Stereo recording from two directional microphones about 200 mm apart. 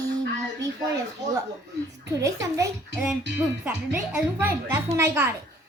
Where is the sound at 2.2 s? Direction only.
15° right (ahead or behind).